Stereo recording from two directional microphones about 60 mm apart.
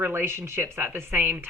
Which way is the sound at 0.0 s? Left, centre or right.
Right.